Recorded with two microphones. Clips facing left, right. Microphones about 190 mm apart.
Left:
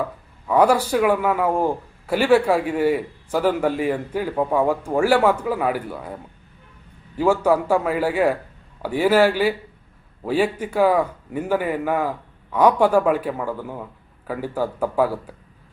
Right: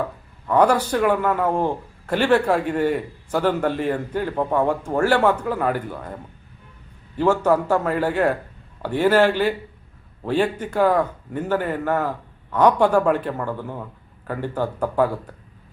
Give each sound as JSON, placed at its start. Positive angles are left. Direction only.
{"t": 0.4, "sound": "a man's voice", "side_deg": 10}
{"t": 7.2, "sound": "a man's voice", "side_deg": 10}